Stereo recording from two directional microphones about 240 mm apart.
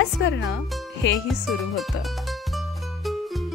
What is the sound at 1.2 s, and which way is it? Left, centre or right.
Music, centre.